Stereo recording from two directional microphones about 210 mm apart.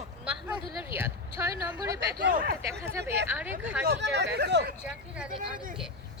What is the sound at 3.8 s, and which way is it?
Speech, 55° right (ahead or behind).